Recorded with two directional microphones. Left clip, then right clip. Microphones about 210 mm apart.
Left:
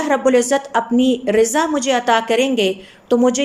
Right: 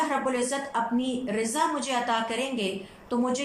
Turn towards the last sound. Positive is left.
turn(degrees=45)  # may be behind; listen again after turning